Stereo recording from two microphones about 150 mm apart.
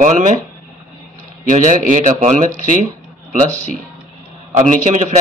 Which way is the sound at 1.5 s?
55° right (ahead or behind).